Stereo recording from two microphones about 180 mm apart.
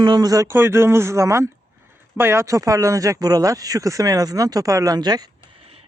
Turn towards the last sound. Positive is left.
turn(degrees=-25)  # may be behind; listen again after turning